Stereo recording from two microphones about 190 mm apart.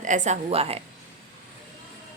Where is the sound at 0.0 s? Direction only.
40° right (ahead or behind).